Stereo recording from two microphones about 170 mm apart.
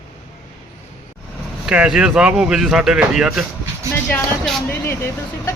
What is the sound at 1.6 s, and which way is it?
Speech, 5° right (ahead or behind).